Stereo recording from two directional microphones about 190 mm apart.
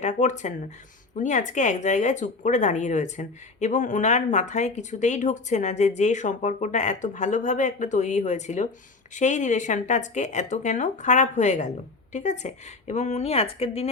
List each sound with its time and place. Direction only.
0.0 s speech: 40° left (ahead or behind)